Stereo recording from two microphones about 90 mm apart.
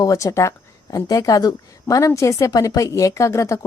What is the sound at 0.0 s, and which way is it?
Speech, 40° left (ahead or behind).